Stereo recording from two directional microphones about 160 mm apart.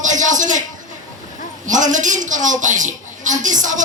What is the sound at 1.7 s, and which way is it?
A woman's voice, 50° right (ahead or behind).